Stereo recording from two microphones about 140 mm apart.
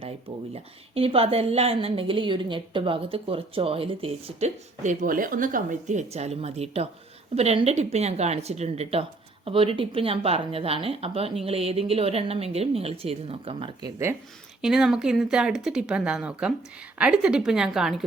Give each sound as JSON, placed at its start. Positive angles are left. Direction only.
{"t": 0.5, "sound": "a woman's voice", "side_deg": -45}
{"t": 13.8, "sound": "speech", "side_deg": -20}
{"t": 14.6, "sound": "speech", "side_deg": -5}